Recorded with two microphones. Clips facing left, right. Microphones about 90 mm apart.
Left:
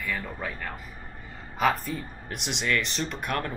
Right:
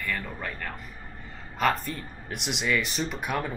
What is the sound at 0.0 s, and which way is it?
Speech, 5° left (ahead or behind).